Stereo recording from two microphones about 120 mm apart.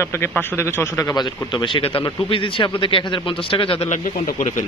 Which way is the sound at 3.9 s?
85° left.